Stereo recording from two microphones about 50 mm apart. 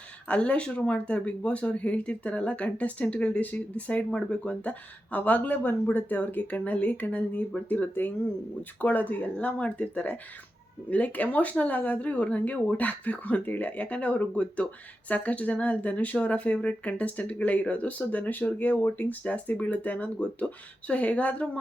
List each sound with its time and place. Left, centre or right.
0.3 s speech: left
7.7 s speech: left